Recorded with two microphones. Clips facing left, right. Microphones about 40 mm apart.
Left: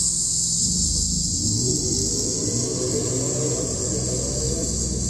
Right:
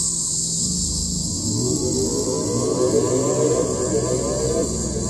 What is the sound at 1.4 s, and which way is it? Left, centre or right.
Music, centre.